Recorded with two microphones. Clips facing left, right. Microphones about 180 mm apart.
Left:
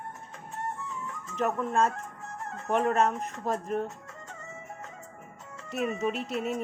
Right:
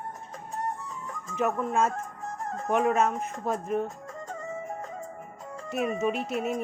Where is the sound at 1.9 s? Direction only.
40° right (ahead or behind).